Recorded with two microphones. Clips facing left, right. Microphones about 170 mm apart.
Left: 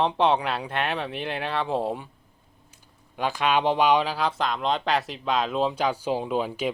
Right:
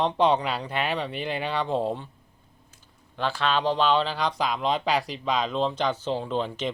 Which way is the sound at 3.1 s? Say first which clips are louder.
Left 2 dB; 15° left (ahead or behind).